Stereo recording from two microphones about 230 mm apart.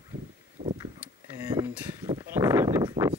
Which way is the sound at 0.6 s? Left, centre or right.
Right.